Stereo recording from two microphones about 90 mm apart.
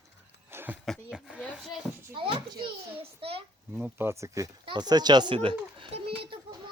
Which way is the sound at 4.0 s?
30° right (ahead or behind).